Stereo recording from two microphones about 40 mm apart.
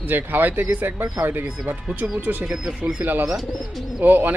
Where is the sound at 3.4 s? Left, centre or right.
Centre.